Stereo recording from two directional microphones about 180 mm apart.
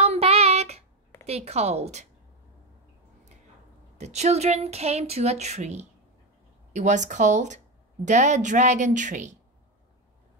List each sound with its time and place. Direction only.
0.0 s child singing: 35° right (ahead or behind)
1.2 s speech: 35° right (ahead or behind)
4.0 s speech: 35° right (ahead or behind)